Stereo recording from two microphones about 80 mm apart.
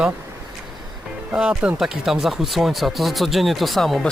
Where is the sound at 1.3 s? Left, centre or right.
Centre.